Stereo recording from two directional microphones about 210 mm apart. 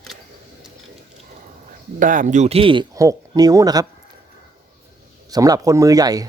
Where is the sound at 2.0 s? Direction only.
40° right (ahead or behind); by 3.9 s 15° right (ahead or behind).